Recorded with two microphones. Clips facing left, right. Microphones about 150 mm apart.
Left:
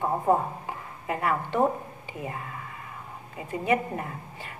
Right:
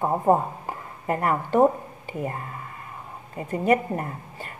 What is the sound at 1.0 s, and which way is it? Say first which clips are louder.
Speech: right 3 dB; 45° right (ahead or behind).